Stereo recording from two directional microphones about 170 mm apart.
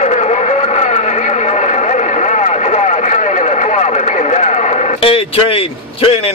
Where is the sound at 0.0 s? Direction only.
40° left (ahead or behind).